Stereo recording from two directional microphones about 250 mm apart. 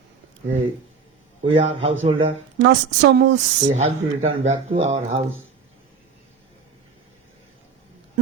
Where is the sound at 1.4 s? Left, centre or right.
Right.